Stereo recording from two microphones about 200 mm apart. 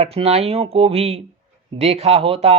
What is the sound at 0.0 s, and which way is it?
Speech, 30° right (ahead or behind).